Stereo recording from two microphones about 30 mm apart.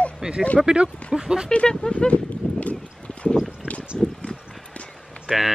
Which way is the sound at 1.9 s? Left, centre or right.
Left.